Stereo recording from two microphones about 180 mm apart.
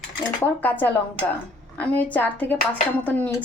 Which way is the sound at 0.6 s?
10° left (ahead or behind).